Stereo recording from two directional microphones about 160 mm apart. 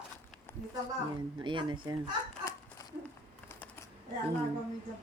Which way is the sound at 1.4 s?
30° right (ahead or behind).